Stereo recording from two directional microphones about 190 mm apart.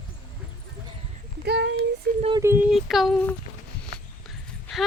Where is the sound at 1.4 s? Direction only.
65° right (ahead or behind).